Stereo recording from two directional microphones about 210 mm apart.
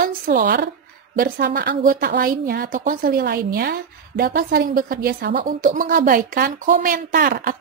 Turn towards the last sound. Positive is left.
turn(degrees=-45)  # may be behind; listen again after turning